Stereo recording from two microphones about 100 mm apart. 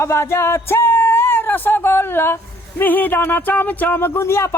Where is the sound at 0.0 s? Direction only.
30° left (ahead or behind).